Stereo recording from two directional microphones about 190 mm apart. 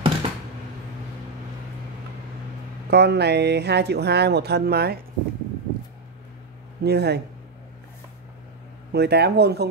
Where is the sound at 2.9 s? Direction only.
60° right (ahead or behind).